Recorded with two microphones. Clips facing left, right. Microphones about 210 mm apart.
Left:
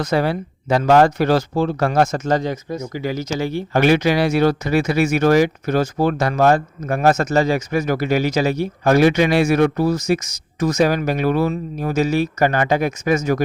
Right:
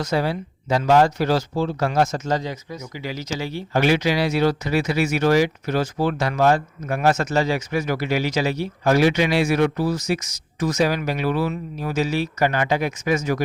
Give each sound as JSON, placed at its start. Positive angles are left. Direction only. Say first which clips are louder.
{"t": 0.0, "sound": "speech", "louder": "left 4 dB", "side_deg": 55}